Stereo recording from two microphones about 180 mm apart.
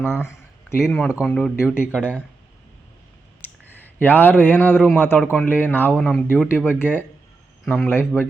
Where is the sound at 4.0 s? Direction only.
10° left (ahead or behind).